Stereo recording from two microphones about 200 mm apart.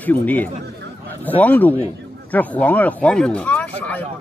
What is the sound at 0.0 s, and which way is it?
Speech, 10° left (ahead or behind).